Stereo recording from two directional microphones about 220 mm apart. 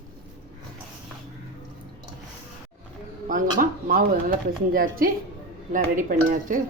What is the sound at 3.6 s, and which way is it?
Speech, 40° right (ahead or behind).